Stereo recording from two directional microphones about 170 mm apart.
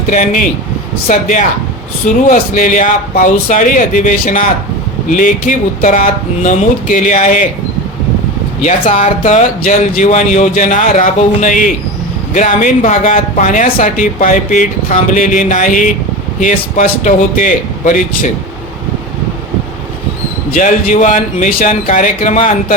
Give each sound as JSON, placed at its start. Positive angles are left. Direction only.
{"t": 0.1, "sound": "speech", "side_deg": 50}
{"t": 8.6, "sound": "speech", "side_deg": 50}
{"t": 20.5, "sound": "speech", "side_deg": 50}